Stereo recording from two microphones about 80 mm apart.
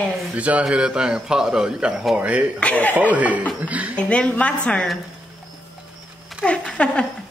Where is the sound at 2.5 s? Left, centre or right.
Centre.